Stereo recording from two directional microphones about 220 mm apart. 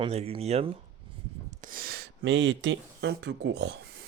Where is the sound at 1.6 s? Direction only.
40° right (ahead or behind).